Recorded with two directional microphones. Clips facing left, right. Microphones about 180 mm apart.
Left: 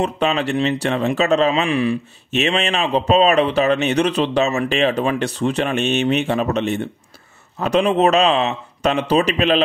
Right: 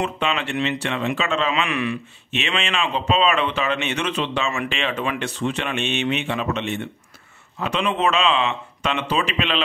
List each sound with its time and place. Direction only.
0.0 s speech: 40° left (ahead or behind)